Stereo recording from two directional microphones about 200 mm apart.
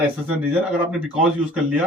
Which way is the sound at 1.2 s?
5° right (ahead or behind).